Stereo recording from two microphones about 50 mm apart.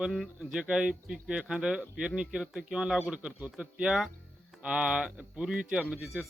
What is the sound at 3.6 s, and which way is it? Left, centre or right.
A man's voice, centre.